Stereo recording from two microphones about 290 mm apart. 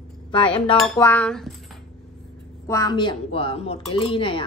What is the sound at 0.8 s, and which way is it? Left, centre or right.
Cutlery, centre.